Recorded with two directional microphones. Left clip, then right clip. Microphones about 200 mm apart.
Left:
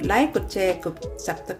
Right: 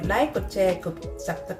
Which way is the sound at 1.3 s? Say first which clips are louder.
Left 2 dB; 55° left (ahead or behind).